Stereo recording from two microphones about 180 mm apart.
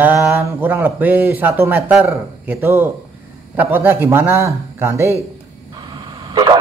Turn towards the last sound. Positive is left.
turn(degrees=-25)  # may be behind; listen again after turning